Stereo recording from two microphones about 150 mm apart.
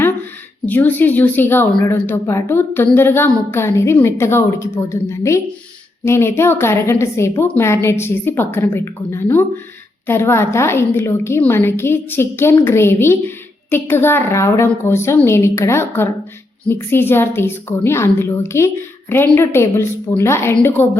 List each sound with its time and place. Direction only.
0.6 s a woman's voice: 10° left (ahead or behind)